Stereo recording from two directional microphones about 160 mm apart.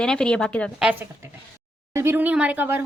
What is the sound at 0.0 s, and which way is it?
Speech, 5° left (ahead or behind).